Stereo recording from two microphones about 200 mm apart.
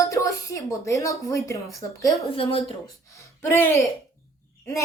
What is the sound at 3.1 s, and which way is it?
Speech, 10° left (ahead or behind).